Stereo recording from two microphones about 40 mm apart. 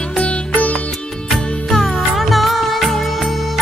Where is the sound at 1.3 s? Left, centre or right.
Centre.